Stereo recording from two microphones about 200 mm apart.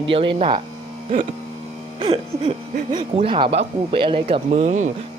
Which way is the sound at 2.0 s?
25° right (ahead or behind).